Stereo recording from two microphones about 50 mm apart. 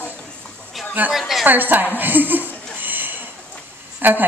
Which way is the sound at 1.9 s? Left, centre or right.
Right.